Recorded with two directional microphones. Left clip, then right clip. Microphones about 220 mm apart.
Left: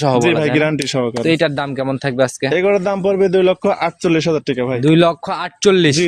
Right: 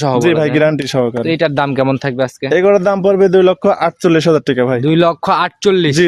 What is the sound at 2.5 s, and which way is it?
A man's voice, 35° right (ahead or behind).